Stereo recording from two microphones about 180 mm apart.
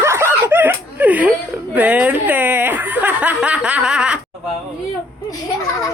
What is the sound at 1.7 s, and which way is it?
Speech, 10° right (ahead or behind).